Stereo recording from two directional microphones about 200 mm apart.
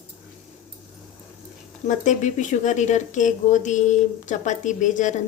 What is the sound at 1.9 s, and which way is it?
Speech, 40° left (ahead or behind).